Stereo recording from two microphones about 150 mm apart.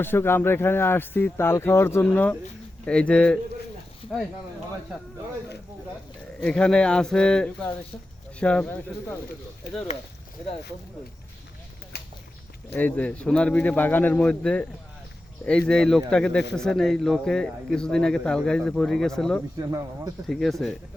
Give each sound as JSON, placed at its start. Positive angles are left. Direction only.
{"t": 0.0, "sound": "speech", "side_deg": 15}
{"t": 6.4, "sound": "a man's voice", "side_deg": 5}
{"t": 12.7, "sound": "a man's voice", "side_deg": 10}
{"t": 19.5, "sound": "speech", "side_deg": -25}
{"t": 20.2, "sound": "a man's voice", "side_deg": 0}